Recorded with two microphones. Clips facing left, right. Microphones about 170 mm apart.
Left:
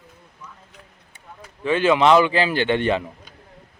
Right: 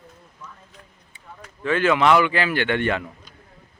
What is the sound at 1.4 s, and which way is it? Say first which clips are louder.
Speech: left 1 dB; 20° left (ahead or behind).